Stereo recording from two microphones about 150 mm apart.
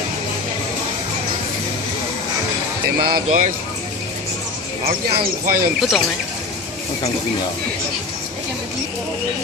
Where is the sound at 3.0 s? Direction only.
80° right.